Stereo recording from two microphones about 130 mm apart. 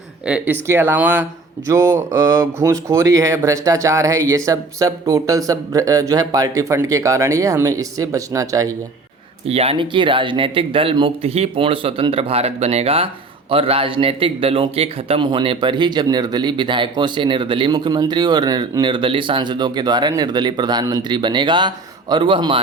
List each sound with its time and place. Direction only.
0.3 s speech: 10° right (ahead or behind); by 8.7 s 25° right (ahead or behind)
9.5 s a man's voice: 50° right (ahead or behind)